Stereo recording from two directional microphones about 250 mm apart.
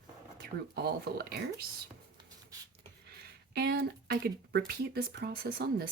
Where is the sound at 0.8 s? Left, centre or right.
Right.